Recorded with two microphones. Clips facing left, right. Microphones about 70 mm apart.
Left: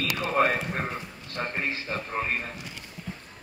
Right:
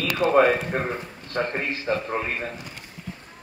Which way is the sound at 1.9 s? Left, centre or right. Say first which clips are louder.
Right 8 dB; right.